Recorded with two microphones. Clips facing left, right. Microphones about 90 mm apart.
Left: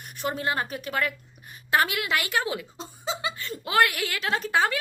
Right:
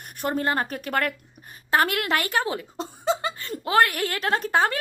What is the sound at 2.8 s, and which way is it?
Laughter, 55° right (ahead or behind).